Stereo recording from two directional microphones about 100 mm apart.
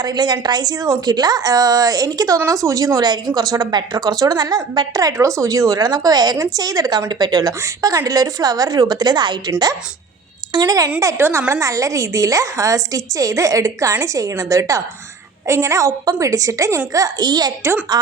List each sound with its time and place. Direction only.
0.0 s a woman's voice: 45° right (ahead or behind)
11.0 s a woman's voice: 25° right (ahead or behind); by 18.1 s 45° right (ahead or behind)